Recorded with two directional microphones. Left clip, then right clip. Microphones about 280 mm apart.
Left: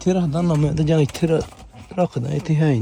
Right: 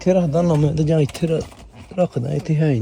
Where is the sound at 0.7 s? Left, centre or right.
Centre.